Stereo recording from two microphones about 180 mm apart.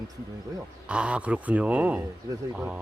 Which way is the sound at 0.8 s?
5° right (ahead or behind).